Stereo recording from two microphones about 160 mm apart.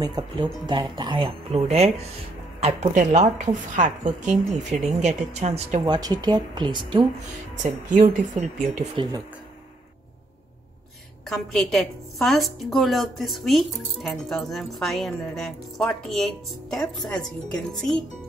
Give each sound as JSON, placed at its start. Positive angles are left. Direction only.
{"t": 0.0, "sound": "a woman's voice", "side_deg": -25}
{"t": 5.9, "sound": "speech", "side_deg": -25}
{"t": 7.6, "sound": "a woman's voice", "side_deg": -50}
{"t": 11.2, "sound": "a woman's voice", "side_deg": 0}